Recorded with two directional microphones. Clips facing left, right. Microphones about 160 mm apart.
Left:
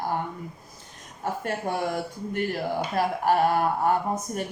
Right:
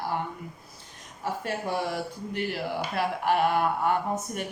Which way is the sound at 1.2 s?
50° left (ahead or behind).